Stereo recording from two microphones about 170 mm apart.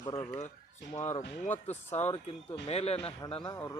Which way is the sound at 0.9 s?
40° left (ahead or behind).